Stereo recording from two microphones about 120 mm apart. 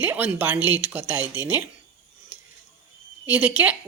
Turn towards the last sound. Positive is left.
turn(degrees=-15)  # may be behind; listen again after turning